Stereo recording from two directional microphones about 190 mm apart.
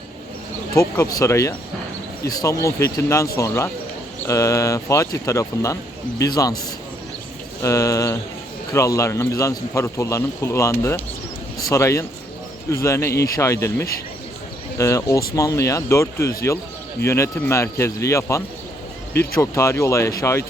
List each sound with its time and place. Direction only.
0.7 s a man's voice: 15° left (ahead or behind)
7.6 s a man's voice: 15° left (ahead or behind)